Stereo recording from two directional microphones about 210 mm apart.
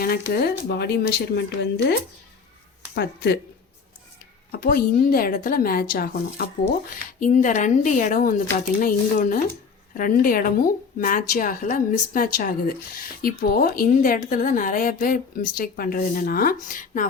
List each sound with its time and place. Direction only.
0.0 s a woman's voice: 45° left (ahead or behind)
4.5 s a woman's voice: 45° left (ahead or behind)